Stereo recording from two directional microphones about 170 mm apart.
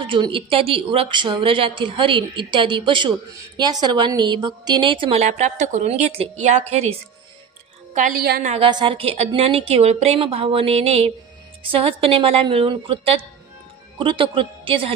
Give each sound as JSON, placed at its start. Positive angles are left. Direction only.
{"t": 0.0, "sound": "a woman's voice", "side_deg": -30}
{"t": 7.9, "sound": "a woman's voice", "side_deg": -50}
{"t": 8.5, "sound": "a woman's voice", "side_deg": -30}